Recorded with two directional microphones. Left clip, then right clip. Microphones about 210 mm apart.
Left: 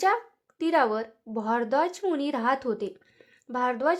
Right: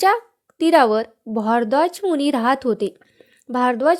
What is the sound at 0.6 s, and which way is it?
A woman's voice, 30° right (ahead or behind).